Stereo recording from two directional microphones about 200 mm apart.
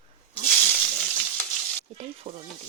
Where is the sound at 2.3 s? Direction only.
25° right (ahead or behind).